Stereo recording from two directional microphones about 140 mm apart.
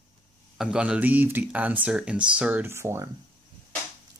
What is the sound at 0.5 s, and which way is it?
Speech, 5° right (ahead or behind).